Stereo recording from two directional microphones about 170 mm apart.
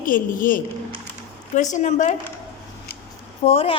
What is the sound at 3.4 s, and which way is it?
Speech, 35° left (ahead or behind).